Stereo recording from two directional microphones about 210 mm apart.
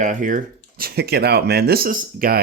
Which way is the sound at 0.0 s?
35° right (ahead or behind).